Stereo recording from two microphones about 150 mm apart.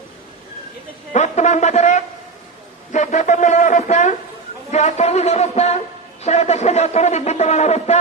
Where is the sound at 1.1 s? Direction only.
50° left (ahead or behind).